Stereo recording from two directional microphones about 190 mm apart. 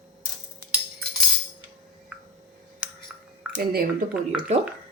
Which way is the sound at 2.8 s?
5° right (ahead or behind).